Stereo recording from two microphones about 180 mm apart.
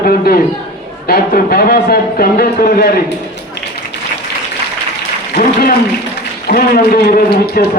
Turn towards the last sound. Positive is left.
turn(degrees=60)  # may be behind; listen again after turning